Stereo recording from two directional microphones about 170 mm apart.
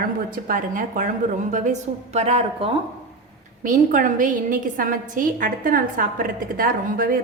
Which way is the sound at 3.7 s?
50° right (ahead or behind).